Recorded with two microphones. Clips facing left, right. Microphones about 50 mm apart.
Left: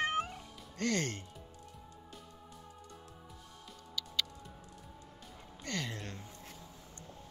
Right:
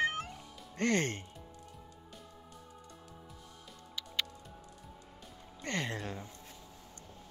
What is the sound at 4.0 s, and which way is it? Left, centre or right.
Music, right.